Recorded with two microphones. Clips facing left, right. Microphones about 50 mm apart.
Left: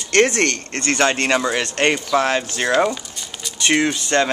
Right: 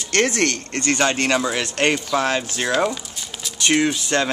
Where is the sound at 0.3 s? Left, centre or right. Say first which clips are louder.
Left 1 dB; centre.